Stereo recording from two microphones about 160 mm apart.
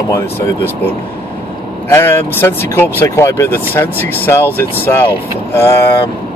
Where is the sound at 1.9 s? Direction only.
15° left (ahead or behind).